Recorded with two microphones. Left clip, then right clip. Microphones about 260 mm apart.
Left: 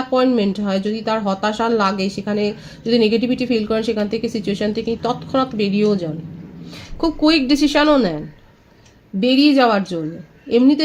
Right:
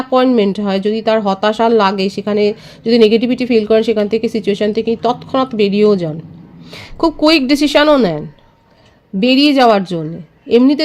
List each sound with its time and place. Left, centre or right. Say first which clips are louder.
0.1 s speech: right 6 dB; right
9.2 s speech: right 4 dB; right